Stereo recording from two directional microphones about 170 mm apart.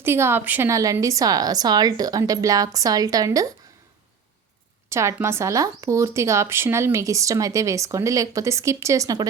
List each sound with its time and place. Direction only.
0.0 s speech: 15° right (ahead or behind)
4.9 s speech: 15° right (ahead or behind)